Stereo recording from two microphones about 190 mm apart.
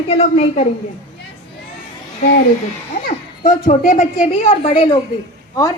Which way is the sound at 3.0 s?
45° left (ahead or behind).